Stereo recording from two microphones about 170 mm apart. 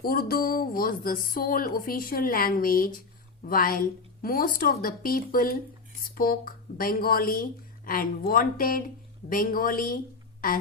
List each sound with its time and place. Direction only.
0.0 s speech: 60° left (ahead or behind)